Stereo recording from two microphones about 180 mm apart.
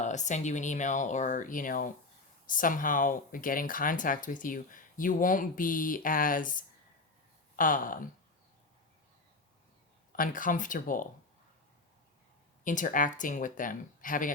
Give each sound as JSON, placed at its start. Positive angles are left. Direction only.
{"t": 0.0, "sound": "speech", "side_deg": 40}
{"t": 10.1, "sound": "speech", "side_deg": 50}
{"t": 12.6, "sound": "speech", "side_deg": 45}